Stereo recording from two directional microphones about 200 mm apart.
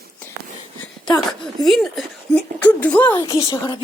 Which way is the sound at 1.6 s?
Centre (ahead or behind).